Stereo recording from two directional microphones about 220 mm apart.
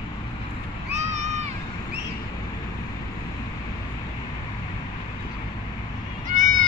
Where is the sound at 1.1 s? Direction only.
30° right (ahead or behind).